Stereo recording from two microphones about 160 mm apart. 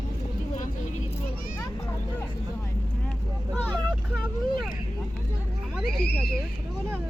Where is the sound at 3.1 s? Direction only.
10° left (ahead or behind).